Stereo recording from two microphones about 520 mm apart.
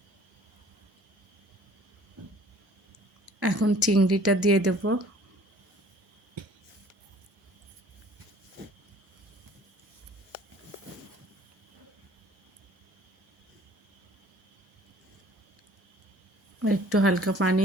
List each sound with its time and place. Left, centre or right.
3.4 s speech: right
16.6 s a woman's voice: right